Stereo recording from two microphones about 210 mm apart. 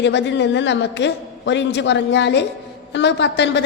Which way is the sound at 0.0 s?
55° left (ahead or behind).